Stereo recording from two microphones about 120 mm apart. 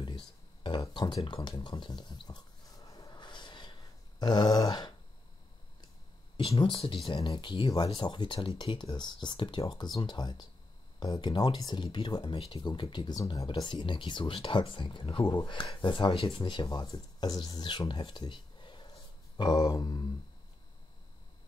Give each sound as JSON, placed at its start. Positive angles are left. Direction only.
{"t": 0.0, "sound": "a sound", "side_deg": 40}
{"t": 6.6, "sound": "speech", "side_deg": 45}
{"t": 16.6, "sound": "speech", "side_deg": 30}